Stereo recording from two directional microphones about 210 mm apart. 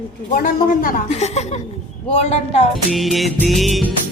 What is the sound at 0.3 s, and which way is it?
A woman's voice, 40° left (ahead or behind).